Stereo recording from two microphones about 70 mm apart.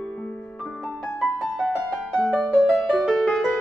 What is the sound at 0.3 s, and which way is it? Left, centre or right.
Music, left.